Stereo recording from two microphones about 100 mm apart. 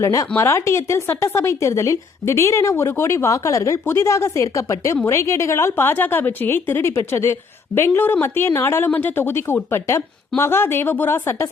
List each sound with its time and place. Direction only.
0.0 s speech: 30° left (ahead or behind)